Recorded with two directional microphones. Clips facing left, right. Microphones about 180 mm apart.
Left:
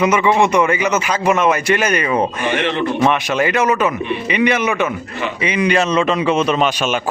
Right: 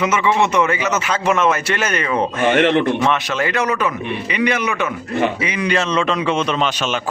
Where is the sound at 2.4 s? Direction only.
55° right (ahead or behind).